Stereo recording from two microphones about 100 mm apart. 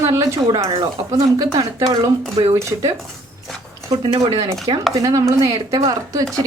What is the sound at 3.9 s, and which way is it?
Speech, 60° right (ahead or behind).